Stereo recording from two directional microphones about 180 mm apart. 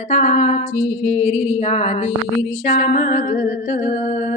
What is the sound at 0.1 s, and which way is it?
Music, 40° left (ahead or behind).